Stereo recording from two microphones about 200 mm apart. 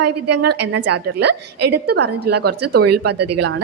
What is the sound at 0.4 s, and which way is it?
A woman's voice, 55° right (ahead or behind).